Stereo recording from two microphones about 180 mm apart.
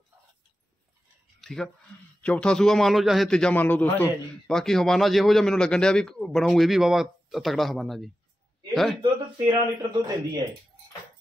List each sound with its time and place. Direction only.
1.4 s a man's voice: centre (ahead or behind)
9.0 s speech: 25° right (ahead or behind)